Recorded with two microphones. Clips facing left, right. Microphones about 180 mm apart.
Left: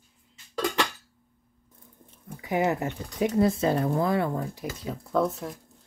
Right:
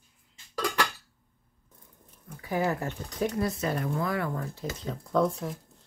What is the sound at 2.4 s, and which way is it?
Speech, 20° left (ahead or behind).